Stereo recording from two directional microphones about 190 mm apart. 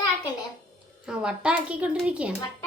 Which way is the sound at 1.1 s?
5° right (ahead or behind).